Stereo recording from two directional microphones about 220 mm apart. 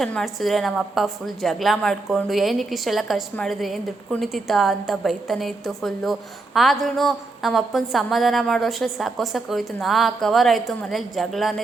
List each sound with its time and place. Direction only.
0.0 s a woman's voice: centre (ahead or behind)